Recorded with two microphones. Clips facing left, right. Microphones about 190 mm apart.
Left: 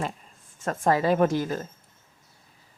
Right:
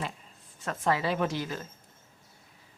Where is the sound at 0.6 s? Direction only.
45° left (ahead or behind).